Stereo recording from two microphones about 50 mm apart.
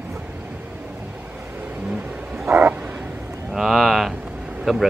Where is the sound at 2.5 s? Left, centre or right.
Right.